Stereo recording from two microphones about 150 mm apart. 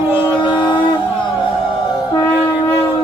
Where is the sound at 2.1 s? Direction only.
20° left (ahead or behind).